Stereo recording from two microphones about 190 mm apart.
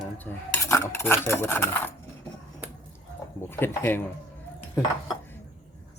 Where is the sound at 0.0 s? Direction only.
10° left (ahead or behind).